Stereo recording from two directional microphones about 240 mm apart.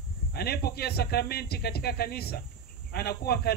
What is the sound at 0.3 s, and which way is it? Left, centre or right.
Speech, left.